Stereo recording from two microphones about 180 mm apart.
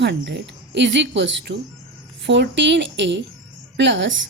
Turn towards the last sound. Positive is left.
turn(degrees=-90)